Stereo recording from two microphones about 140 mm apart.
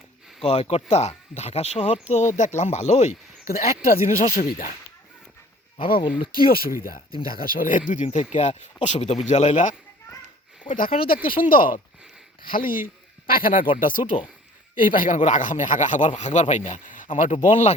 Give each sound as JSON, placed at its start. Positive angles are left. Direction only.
{"t": 0.4, "sound": "speech", "side_deg": 45}
{"t": 3.8, "sound": "speech", "side_deg": 80}
{"t": 6.5, "sound": "speech", "side_deg": 90}
{"t": 8.0, "sound": "speech", "side_deg": 45}
{"t": 10.6, "sound": "speech", "side_deg": 75}
{"t": 11.0, "sound": "a man's voice", "side_deg": 90}
{"t": 14.0, "sound": "speech", "side_deg": 35}
{"t": 14.9, "sound": "speech", "side_deg": 65}